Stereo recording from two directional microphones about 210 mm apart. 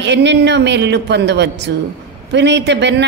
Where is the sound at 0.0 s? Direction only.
55° right (ahead or behind).